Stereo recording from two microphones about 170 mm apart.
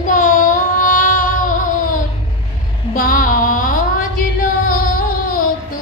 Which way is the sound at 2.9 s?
55° left (ahead or behind).